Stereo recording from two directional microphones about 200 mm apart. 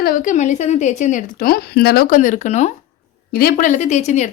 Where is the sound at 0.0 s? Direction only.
45° left (ahead or behind).